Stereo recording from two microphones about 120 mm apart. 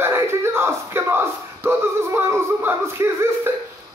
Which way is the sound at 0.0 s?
20° right (ahead or behind).